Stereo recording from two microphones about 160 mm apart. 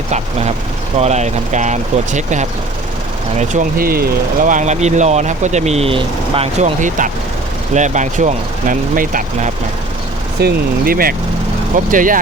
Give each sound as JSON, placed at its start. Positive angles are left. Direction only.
{"t": 0.1, "sound": "speech", "side_deg": -45}
{"t": 10.4, "sound": "speech", "side_deg": -65}
{"t": 11.9, "sound": "speech", "side_deg": -55}